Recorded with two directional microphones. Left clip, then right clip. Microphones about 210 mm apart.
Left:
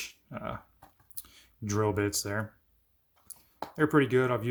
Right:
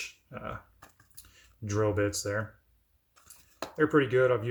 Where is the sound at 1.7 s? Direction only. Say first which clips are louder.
Right 1 dB; 55° left (ahead or behind).